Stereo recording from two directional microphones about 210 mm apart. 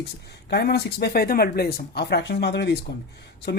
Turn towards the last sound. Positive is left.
turn(degrees=55)  # may be behind; listen again after turning